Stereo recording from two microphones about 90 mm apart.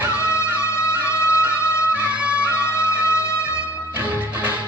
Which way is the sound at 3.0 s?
30° left (ahead or behind).